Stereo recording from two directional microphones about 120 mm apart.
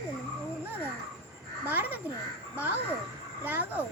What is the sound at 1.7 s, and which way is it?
Speech, 15° right (ahead or behind).